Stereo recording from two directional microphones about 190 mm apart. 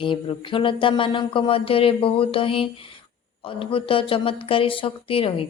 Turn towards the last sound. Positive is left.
turn(degrees=30)  # may be behind; listen again after turning